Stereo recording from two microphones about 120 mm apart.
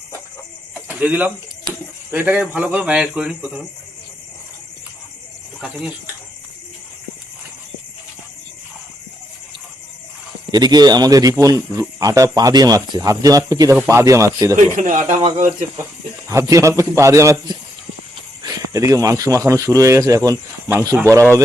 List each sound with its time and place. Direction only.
0.7 s chicken: 15° right (ahead or behind)
2.0 s a man's voice: 15° right (ahead or behind)
5.5 s speech: 5° right (ahead or behind)
10.5 s speech: 35° right (ahead or behind)
14.5 s speech: 90° right
16.3 s speech: 25° right (ahead or behind)